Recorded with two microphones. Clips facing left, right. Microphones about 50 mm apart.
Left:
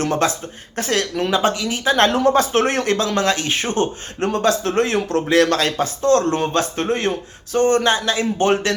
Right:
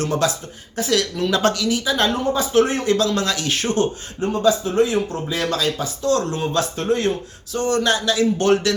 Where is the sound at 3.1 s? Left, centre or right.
Left.